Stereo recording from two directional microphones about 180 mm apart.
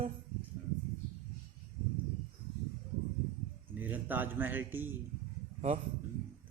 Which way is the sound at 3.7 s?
10° right (ahead or behind).